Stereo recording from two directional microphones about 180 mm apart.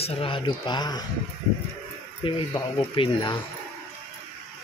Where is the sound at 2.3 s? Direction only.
30° left (ahead or behind).